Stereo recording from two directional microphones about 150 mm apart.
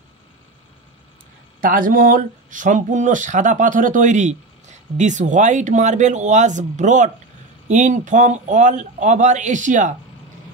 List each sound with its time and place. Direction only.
1.6 s speech: 65° right (ahead or behind)